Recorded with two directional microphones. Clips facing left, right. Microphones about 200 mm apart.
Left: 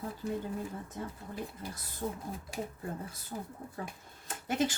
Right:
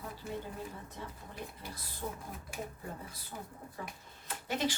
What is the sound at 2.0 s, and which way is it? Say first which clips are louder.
Speech: left 4 dB; 45° left (ahead or behind).